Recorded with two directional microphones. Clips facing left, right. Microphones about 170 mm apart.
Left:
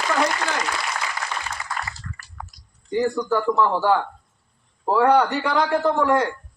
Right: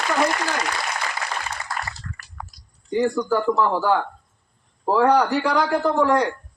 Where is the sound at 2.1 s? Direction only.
40° right (ahead or behind).